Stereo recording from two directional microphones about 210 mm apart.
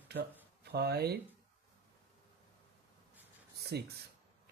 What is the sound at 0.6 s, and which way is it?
Speech, 50° right (ahead or behind).